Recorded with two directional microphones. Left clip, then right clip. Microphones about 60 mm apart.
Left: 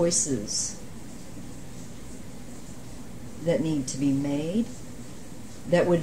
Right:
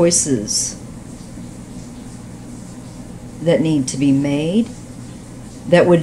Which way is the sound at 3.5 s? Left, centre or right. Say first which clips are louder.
Right 10 dB; right.